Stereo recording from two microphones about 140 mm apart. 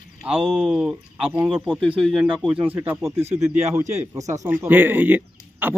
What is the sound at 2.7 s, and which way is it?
A man's voice, 20° right (ahead or behind).